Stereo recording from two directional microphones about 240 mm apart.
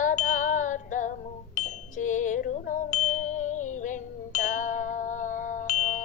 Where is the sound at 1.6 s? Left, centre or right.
Left.